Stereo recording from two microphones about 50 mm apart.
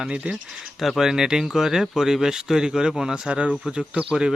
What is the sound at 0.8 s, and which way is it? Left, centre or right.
A man's voice, centre.